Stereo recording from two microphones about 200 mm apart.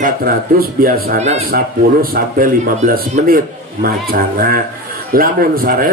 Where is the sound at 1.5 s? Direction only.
45° right (ahead or behind).